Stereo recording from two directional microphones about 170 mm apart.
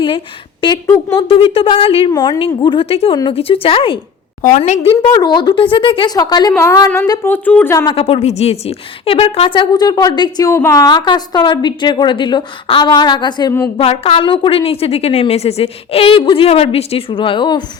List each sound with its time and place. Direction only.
0.9 s a woman's voice: 30° left (ahead or behind)
4.4 s speech: 45° left (ahead or behind)
5.0 s a woman's voice: 25° left (ahead or behind)
7.9 s a woman's voice: 35° left (ahead or behind)